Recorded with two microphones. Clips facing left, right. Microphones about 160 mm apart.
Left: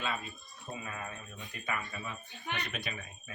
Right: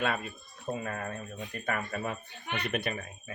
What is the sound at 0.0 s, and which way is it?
Speech, 60° right (ahead or behind).